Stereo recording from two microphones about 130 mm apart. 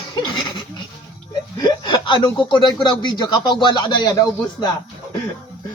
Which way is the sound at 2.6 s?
35° left (ahead or behind).